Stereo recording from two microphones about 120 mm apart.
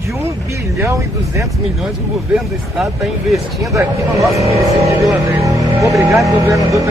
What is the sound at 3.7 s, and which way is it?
Speech, 25° right (ahead or behind).